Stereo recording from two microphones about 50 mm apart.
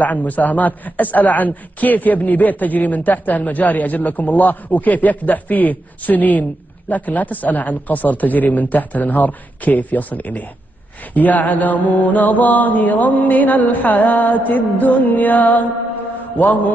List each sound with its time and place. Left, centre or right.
0.0 s a man's voice: left